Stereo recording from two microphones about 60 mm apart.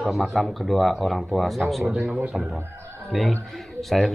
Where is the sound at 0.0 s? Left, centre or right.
Centre.